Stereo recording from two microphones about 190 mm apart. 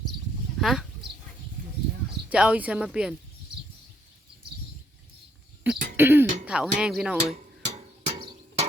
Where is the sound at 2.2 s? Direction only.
5° right (ahead or behind).